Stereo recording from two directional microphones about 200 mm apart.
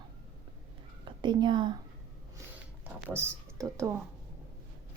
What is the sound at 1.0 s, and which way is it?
Speech, 25° right (ahead or behind).